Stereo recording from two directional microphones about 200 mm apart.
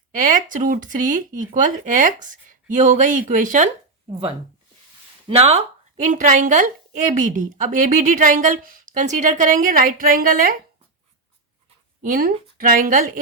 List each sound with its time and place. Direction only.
0.1 s a woman's voice: 40° right (ahead or behind)
5.3 s a woman's voice: 30° right (ahead or behind)
12.0 s speech: 45° right (ahead or behind)